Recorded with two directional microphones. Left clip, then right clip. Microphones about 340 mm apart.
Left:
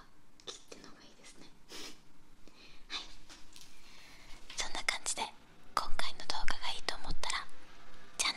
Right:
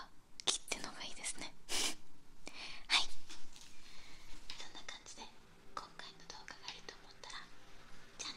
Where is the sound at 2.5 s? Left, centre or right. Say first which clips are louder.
Right 9 dB; right.